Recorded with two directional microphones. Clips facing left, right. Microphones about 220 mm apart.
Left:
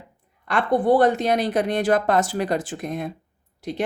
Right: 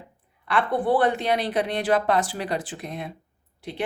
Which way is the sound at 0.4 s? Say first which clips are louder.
Left 4 dB; 40° left (ahead or behind).